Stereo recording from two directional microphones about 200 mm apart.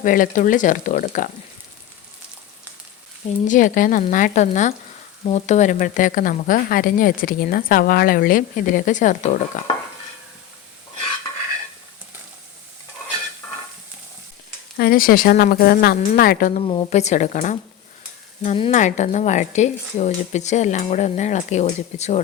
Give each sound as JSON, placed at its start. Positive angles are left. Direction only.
{"t": 0.0, "sound": "speech", "side_deg": 40}
{"t": 3.4, "sound": "speech", "side_deg": 40}
{"t": 14.8, "sound": "speech", "side_deg": 50}
{"t": 16.6, "sound": "speech", "side_deg": 30}